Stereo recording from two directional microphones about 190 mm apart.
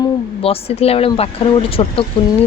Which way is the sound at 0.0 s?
30° left (ahead or behind).